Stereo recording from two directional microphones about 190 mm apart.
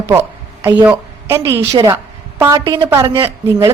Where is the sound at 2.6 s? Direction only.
25° right (ahead or behind).